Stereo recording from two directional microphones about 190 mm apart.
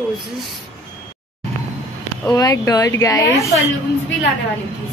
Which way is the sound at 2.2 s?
20° left (ahead or behind).